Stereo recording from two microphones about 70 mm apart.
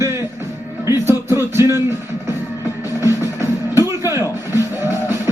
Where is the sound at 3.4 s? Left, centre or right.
Right.